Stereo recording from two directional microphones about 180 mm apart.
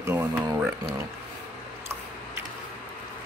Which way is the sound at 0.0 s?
15° right (ahead or behind).